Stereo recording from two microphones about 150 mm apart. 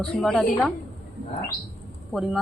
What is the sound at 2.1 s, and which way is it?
Speech, centre (ahead or behind).